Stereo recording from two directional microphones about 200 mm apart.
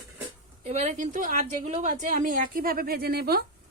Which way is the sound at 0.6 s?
35° right (ahead or behind).